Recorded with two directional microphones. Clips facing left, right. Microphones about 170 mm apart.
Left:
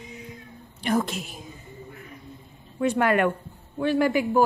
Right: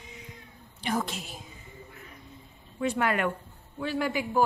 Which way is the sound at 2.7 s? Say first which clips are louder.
Left 6 dB; 55° left (ahead or behind).